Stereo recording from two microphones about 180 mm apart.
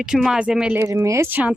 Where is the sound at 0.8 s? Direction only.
15° right (ahead or behind).